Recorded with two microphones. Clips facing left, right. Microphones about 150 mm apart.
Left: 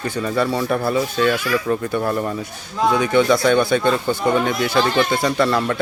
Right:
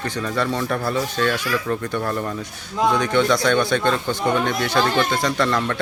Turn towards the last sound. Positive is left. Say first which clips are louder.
# left 3 dB
turn(degrees=10)  # may be behind; listen again after turning